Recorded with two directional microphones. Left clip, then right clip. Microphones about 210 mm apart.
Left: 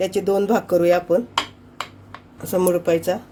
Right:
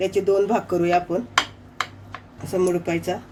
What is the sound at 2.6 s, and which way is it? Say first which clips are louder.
Speech: left 4 dB; 35° left (ahead or behind).